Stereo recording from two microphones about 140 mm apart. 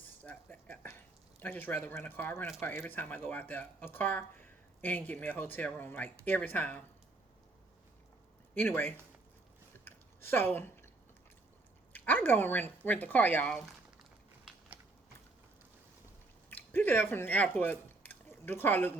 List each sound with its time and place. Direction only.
0.0 s speech: 10° left (ahead or behind)
8.5 s speech: 15° left (ahead or behind)
9.7 s chewing: 15° left (ahead or behind)
11.9 s speech: 10° left (ahead or behind)
16.5 s speech: 15° left (ahead or behind)